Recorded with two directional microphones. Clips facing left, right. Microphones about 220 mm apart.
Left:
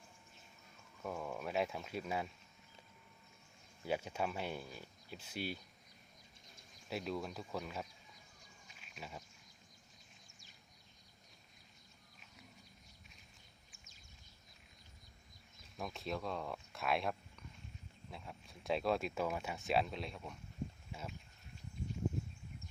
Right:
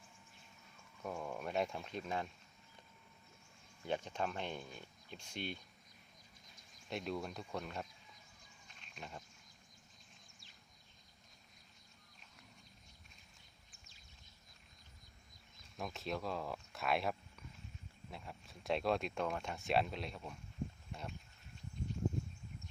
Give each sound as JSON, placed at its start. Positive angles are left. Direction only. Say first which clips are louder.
{"t": 1.0, "sound": "speech", "louder": "even", "side_deg": 0}
{"t": 3.8, "sound": "speech", "louder": "left 1 dB", "side_deg": 10}
{"t": 6.9, "sound": "speech", "louder": "even", "side_deg": 0}
{"t": 8.6, "sound": "a sound", "louder": "even", "side_deg": 5}
{"t": 15.8, "sound": "speech", "louder": "even", "side_deg": 0}